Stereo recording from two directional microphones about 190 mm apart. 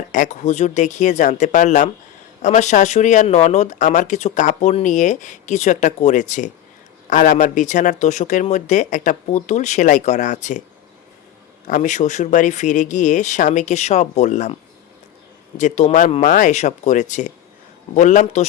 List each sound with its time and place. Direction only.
0.1 s speech: 40° left (ahead or behind)
11.7 s speech: 40° left (ahead or behind)